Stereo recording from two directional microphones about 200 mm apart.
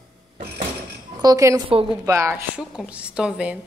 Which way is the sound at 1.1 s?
15° right (ahead or behind).